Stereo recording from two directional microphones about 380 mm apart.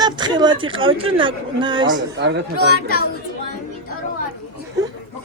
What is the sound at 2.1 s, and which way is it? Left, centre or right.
Speech, right.